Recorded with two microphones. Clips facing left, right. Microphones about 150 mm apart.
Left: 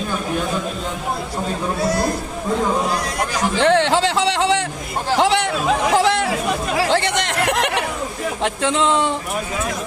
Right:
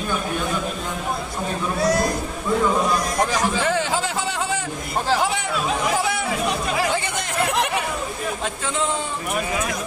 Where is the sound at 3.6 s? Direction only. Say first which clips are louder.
Left 7 dB; 75° left (ahead or behind).